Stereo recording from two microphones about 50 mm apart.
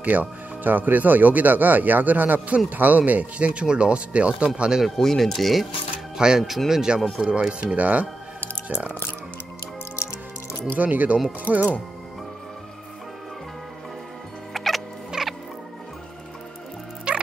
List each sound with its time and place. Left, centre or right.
0.0 s speech: right; by 4.8 s centre
4.8 s speech: centre
6.1 s speech: centre; by 8.9 s right
10.8 s speech: right
14.5 s a sound: centre
17.1 s dog: right